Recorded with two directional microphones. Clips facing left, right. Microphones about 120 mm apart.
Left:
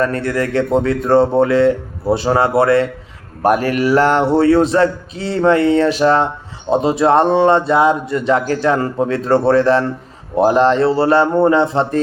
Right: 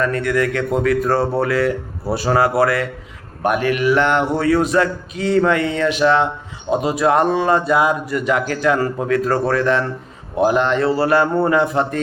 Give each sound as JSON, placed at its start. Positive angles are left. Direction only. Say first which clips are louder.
{"t": 0.0, "sound": "speech", "louder": "left 1 dB", "side_deg": 35}
{"t": 3.4, "sound": "speech", "louder": "left 3 dB", "side_deg": 40}